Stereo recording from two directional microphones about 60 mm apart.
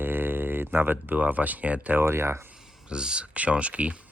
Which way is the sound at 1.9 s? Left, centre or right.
Right.